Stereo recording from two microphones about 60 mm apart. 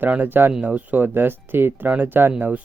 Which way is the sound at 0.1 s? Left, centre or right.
Right.